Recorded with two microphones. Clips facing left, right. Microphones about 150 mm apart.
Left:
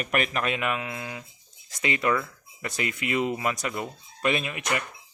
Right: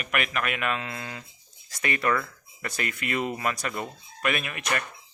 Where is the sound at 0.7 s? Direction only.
10° left (ahead or behind).